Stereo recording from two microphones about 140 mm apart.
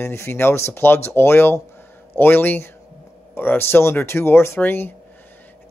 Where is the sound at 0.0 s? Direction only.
20° left (ahead or behind).